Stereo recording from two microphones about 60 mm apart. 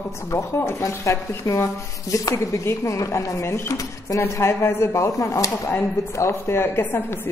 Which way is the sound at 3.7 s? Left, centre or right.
Left.